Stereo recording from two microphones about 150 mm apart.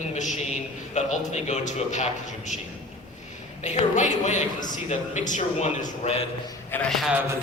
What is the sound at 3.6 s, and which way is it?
A man's voice, 55° left (ahead or behind).